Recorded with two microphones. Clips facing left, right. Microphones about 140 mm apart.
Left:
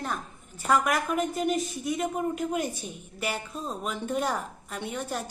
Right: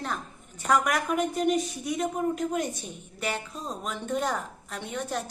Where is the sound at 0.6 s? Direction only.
Centre (ahead or behind).